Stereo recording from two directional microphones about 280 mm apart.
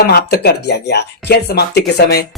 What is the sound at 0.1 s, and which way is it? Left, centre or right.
Speech, left.